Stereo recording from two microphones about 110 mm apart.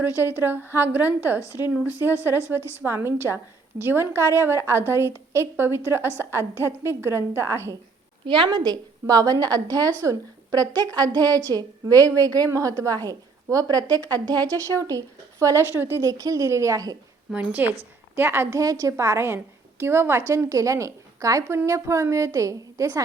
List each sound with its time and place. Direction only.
0.2 s a woman's voice: 20° right (ahead or behind)
8.2 s a woman's voice: 45° right (ahead or behind)
17.3 s a woman's voice: 15° right (ahead or behind)
18.6 s a woman's voice: 30° right (ahead or behind)